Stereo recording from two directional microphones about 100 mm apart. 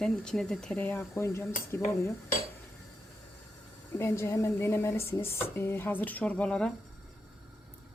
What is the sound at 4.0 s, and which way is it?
Speech, 25° left (ahead or behind).